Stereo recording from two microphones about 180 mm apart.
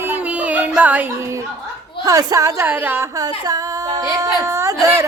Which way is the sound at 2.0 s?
20° right (ahead or behind).